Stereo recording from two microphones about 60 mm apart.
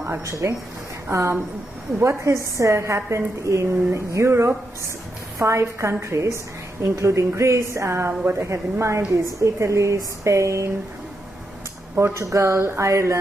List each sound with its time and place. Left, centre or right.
0.0 s a woman's voice: right
11.9 s a woman's voice: right